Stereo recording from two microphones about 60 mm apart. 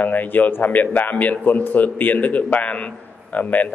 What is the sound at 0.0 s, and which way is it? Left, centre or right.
A man's voice, left.